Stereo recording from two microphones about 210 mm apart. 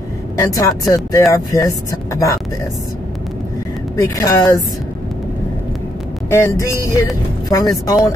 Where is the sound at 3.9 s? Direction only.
15° left (ahead or behind).